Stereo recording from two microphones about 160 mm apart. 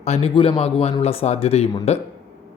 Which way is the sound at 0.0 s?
40° left (ahead or behind).